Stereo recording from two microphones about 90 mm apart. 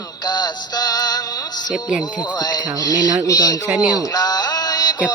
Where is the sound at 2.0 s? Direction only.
55° left (ahead or behind).